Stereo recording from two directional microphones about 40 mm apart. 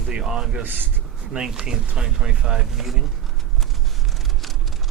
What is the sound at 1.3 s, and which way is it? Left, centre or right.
Speech, centre.